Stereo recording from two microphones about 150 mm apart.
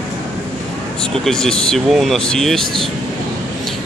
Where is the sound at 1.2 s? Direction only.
5° left (ahead or behind).